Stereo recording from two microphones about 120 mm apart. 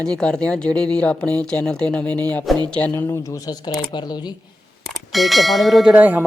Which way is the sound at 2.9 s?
25° left (ahead or behind).